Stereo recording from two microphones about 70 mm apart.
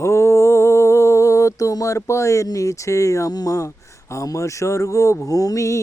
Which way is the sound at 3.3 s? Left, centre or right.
Left.